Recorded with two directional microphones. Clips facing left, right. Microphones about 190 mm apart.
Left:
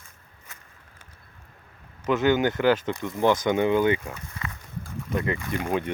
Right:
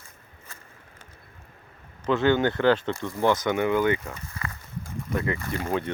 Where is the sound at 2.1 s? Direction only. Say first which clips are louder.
Even; 15° left (ahead or behind).